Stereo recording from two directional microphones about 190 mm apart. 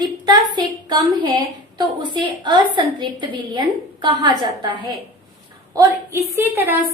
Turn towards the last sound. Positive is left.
turn(degrees=-10)  # may be behind; listen again after turning